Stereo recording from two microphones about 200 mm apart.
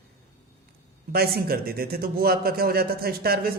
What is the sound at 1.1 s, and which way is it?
A man's voice, 50° right (ahead or behind).